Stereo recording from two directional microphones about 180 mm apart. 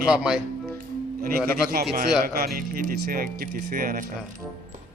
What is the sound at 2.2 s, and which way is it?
A man's voice, 55° right (ahead or behind).